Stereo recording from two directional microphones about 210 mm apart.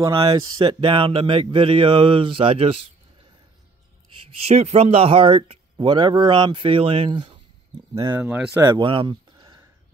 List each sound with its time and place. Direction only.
0.0 s speech: 25° right (ahead or behind)
4.4 s speech: 30° right (ahead or behind); by 8.8 s 10° right (ahead or behind)
8.8 s a sound: 25° right (ahead or behind)